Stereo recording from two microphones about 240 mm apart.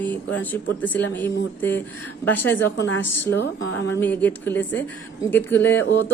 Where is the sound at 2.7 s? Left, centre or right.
Left.